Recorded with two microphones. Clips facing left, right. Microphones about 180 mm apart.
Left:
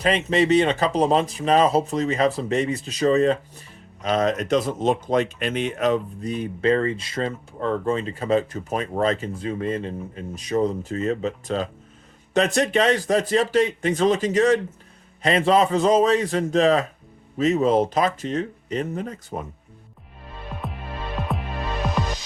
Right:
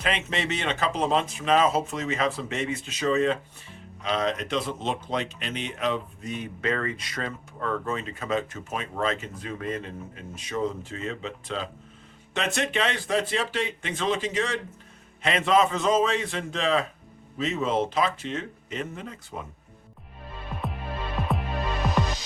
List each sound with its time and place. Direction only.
0.0 s speech: 35° left (ahead or behind)
20.5 s music: centre (ahead or behind)